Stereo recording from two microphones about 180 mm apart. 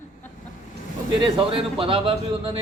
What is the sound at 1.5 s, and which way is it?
A man's voice, 30° right (ahead or behind).